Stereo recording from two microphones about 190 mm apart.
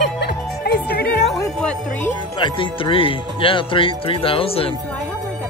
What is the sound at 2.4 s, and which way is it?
Speech, 25° left (ahead or behind).